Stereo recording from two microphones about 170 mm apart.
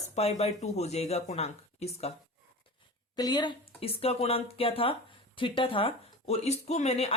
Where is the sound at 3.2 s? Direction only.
25° left (ahead or behind).